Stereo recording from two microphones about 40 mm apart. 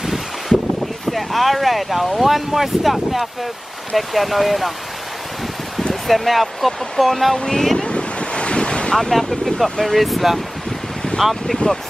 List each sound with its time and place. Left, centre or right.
0.0 s wind: centre
1.0 s speech: centre
6.0 s speech: centre
7.8 s waves: left
8.9 s speech: centre